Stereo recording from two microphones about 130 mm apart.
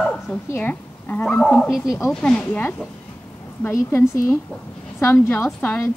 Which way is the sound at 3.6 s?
20° left (ahead or behind).